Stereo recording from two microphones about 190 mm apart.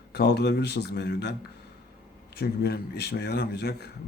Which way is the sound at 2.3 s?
60° left (ahead or behind).